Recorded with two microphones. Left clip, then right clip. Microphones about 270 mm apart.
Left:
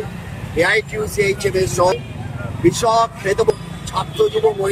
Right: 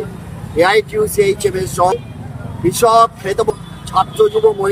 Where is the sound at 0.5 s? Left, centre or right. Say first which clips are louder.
Right 4 dB; right.